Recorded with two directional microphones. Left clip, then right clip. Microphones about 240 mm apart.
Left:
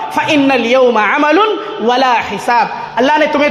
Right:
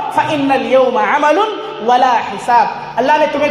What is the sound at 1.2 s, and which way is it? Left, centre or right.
A man's voice, left.